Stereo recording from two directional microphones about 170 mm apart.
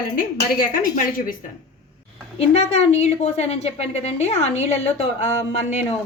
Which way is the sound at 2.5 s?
40° left (ahead or behind).